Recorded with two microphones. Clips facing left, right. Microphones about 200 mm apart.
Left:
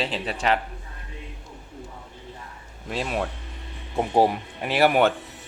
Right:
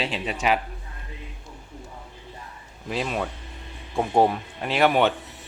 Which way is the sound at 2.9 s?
Centre (ahead or behind).